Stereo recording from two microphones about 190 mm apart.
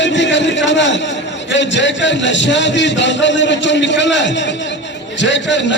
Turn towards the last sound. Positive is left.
turn(degrees=70)  # may be behind; listen again after turning